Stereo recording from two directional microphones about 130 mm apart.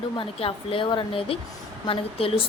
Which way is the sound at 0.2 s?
45° left (ahead or behind).